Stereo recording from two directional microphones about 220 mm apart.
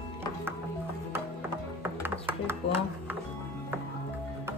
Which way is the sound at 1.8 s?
10° right (ahead or behind).